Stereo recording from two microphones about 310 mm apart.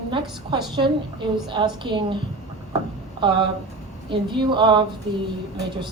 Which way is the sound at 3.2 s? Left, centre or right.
Centre.